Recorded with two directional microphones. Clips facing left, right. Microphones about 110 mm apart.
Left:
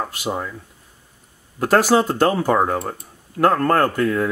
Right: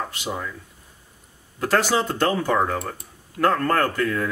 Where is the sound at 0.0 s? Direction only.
25° left (ahead or behind).